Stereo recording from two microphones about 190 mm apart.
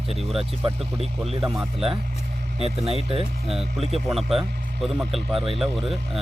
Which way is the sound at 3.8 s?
35° right (ahead or behind).